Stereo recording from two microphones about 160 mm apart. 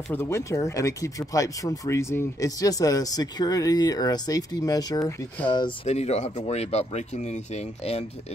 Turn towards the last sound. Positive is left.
turn(degrees=40)  # may be behind; listen again after turning